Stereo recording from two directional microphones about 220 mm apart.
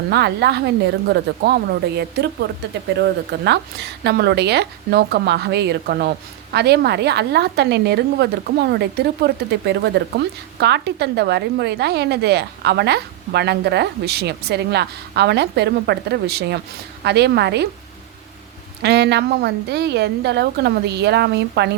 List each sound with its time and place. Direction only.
0.1 s a woman's voice: 50° right (ahead or behind)
18.8 s a woman's voice: 50° right (ahead or behind)